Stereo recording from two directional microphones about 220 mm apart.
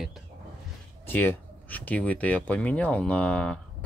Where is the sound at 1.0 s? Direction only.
10° left (ahead or behind).